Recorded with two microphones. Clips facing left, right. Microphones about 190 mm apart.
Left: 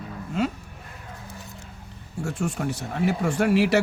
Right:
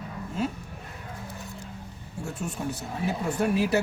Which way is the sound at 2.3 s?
85° left.